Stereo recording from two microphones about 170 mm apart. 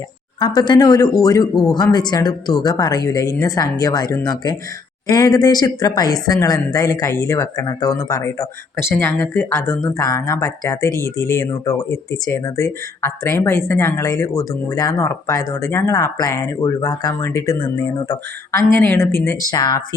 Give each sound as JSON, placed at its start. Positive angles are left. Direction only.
{"t": 0.3, "sound": "speech", "side_deg": 25}
{"t": 18.1, "sound": "speech", "side_deg": 15}